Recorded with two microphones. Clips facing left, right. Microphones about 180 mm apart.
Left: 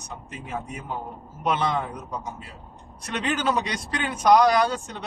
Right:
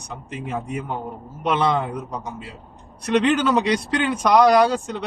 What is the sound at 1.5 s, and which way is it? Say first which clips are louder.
A man's voice: right 4 dB; 65° right (ahead or behind).